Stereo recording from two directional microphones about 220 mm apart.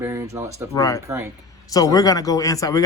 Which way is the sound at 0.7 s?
15° left (ahead or behind).